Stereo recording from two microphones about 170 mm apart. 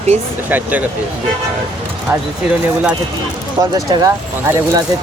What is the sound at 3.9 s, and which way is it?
Speech, 20° right (ahead or behind).